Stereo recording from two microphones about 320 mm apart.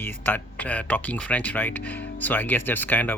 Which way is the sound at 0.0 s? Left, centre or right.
Centre.